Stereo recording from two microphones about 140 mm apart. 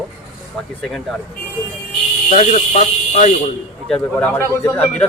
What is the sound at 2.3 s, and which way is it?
Speech, 60° left (ahead or behind).